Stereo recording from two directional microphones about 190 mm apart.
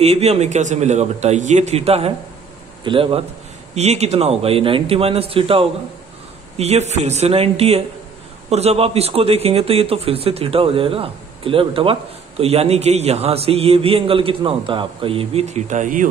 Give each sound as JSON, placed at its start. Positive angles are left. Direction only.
{"t": 0.0, "sound": "a man's voice", "side_deg": -35}